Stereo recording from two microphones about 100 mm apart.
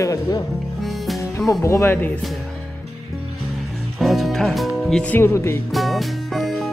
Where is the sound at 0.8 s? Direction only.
Centre (ahead or behind).